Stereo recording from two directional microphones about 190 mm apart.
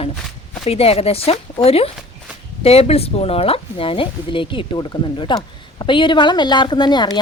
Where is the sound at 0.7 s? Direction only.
30° left (ahead or behind).